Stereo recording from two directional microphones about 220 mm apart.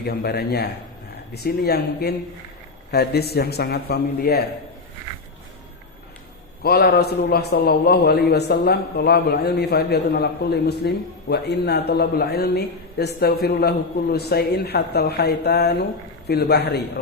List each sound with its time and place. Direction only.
0.0 s speech: 50° left (ahead or behind)
6.6 s speech: 45° left (ahead or behind)